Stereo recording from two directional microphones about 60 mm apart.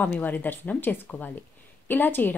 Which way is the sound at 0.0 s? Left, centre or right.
Left.